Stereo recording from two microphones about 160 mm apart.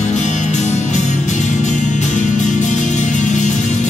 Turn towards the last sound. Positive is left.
turn(degrees=50)  # may be behind; listen again after turning